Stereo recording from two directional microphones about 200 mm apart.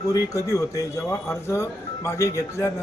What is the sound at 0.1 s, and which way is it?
Speech, 15° left (ahead or behind).